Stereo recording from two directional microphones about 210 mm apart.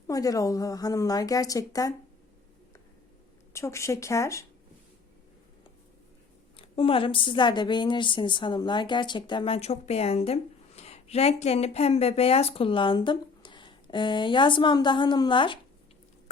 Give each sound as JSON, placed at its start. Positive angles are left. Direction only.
{"t": 0.1, "sound": "a woman's voice", "side_deg": 15}
{"t": 3.5, "sound": "a woman's voice", "side_deg": 15}
{"t": 6.6, "sound": "a woman's voice", "side_deg": 25}